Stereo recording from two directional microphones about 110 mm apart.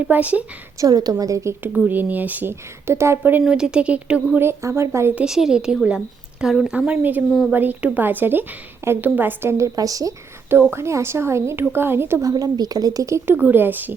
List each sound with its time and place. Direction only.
0.1 s speech: 15° right (ahead or behind)
0.8 s a woman's voice: 35° right (ahead or behind)
1.7 s speech: 15° right (ahead or behind)
3.4 s speech: 5° right (ahead or behind)
4.4 s a woman's voice: 25° right (ahead or behind)
5.2 s a woman's voice: 5° right (ahead or behind)
6.7 s a woman's voice: 15° right (ahead or behind)
12.3 s a woman's voice: 35° right (ahead or behind); by 13.9 s 15° right (ahead or behind)